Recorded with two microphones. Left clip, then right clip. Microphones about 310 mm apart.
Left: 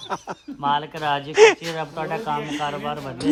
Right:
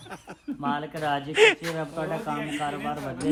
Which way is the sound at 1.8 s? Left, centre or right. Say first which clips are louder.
Left 3 dB; left.